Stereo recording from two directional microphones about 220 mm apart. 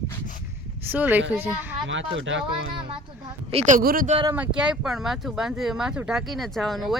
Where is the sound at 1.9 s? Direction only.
55° right (ahead or behind).